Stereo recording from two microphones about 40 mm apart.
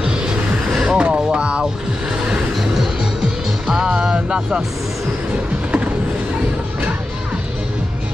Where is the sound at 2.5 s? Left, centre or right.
Centre; by 4.6 s right.